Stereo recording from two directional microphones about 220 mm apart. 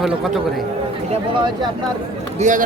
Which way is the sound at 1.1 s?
20° right (ahead or behind).